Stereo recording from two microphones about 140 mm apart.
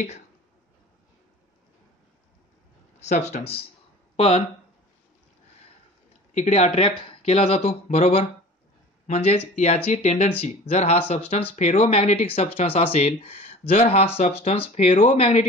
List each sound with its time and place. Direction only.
3.1 s speech: 55° left (ahead or behind)
6.3 s speech: 55° left (ahead or behind)